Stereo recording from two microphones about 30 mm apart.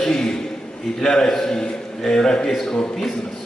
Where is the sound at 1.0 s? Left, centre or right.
Centre.